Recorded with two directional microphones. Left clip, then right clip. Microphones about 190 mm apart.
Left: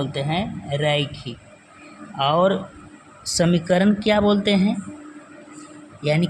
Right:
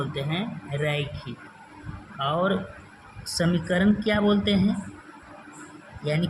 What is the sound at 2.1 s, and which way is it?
Speech, 35° left (ahead or behind).